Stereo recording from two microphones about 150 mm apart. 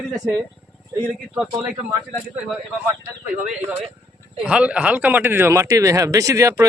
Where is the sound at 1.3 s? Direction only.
5° right (ahead or behind).